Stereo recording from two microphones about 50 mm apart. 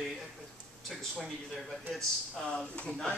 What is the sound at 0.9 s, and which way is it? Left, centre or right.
Speech, centre.